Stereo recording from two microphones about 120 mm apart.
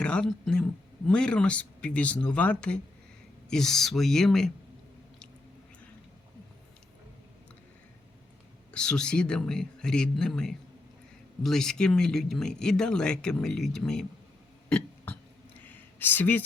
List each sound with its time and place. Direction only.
0.0 s speech: 10° left (ahead or behind)
8.7 s speech: 5° left (ahead or behind)
14.7 s burping: 15° left (ahead or behind)
15.6 s a sound: 15° left (ahead or behind)